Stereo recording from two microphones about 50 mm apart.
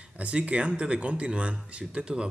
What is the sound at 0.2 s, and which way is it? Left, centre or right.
Speech, right.